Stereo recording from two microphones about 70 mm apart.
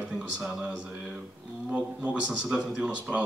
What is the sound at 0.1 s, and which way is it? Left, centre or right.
Speech, centre.